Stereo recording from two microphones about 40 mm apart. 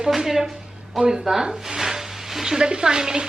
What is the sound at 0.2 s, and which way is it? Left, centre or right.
A woman's voice, centre.